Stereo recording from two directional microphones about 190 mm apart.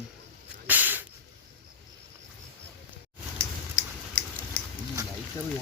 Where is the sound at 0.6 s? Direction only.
10° right (ahead or behind).